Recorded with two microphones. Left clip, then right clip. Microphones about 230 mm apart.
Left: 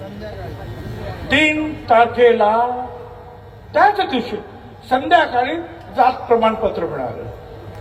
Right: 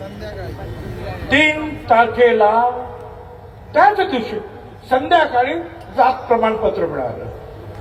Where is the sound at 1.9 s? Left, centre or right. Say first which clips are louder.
Even; left.